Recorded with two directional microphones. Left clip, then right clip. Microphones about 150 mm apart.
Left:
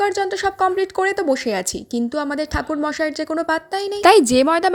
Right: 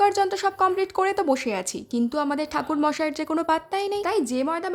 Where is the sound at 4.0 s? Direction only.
50° left (ahead or behind).